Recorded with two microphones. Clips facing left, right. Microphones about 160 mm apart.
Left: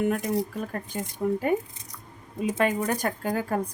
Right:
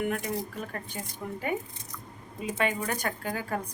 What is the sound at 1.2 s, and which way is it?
Speech, 40° left (ahead or behind).